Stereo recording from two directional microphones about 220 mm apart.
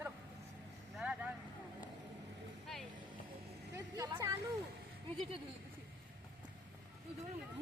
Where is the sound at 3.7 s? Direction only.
15° right (ahead or behind).